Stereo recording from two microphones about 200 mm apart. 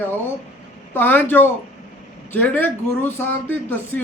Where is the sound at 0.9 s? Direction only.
10° left (ahead or behind).